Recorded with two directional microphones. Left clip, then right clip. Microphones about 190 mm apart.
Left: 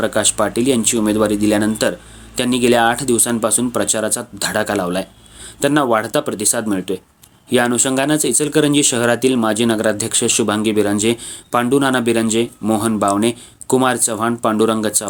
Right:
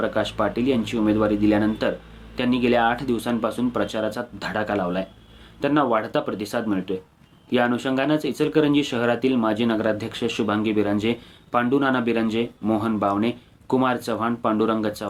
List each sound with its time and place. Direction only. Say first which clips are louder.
0.0 s speech: left 6 dB; 50° left (ahead or behind)